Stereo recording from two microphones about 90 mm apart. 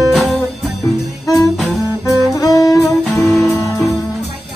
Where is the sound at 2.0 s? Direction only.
40° left (ahead or behind).